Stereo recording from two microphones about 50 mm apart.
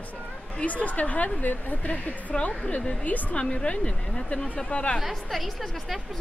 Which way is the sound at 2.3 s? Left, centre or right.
Left.